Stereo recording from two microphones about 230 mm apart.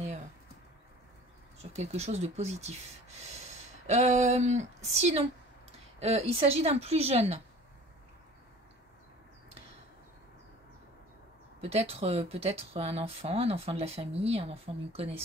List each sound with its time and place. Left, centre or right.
1.8 s speech: right
11.6 s speech: right